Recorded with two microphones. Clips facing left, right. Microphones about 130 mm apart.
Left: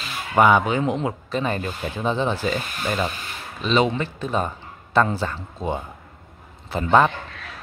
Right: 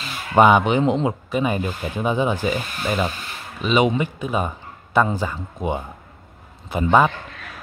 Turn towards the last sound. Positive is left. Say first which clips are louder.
# right 1 dB
turn(degrees=-15)  # may be behind; listen again after turning